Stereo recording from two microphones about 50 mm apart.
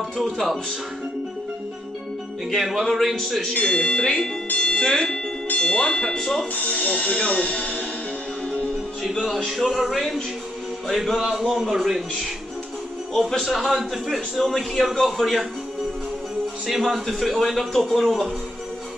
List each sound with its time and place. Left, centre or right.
0.2 s a man's voice: centre
2.6 s a man's voice: centre
3.6 s speech: centre
4.8 s a man's voice: centre
6.5 s speech: left
9.1 s a man's voice: centre
13.1 s a man's voice: centre
16.6 s a man's voice: centre